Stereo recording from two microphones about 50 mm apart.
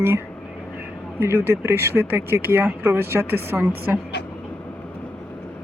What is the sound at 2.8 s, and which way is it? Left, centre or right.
Speech, right.